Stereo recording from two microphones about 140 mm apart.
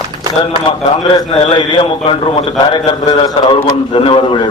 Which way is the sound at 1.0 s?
40° left (ahead or behind).